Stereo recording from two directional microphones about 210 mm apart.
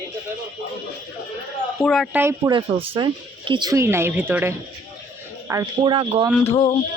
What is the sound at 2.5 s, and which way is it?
Speech, 25° right (ahead or behind).